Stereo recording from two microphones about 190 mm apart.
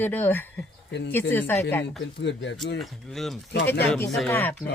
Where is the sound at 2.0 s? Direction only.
70° left (ahead or behind).